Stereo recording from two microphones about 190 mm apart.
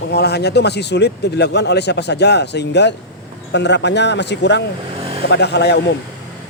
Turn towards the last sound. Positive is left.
turn(degrees=60)  # may be behind; listen again after turning